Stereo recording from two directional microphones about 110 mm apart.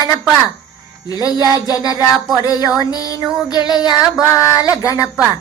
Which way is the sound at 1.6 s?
35° left (ahead or behind).